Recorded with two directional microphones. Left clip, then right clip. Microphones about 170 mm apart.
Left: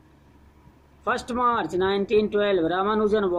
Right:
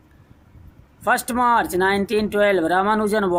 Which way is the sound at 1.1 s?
50° right (ahead or behind).